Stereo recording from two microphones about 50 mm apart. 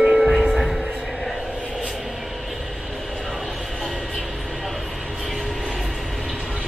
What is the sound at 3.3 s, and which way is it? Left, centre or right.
Vehicle, centre.